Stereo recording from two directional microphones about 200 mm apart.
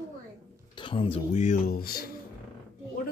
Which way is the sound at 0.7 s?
25° left (ahead or behind).